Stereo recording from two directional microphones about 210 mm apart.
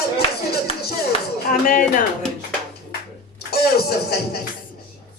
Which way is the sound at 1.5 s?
40° left (ahead or behind).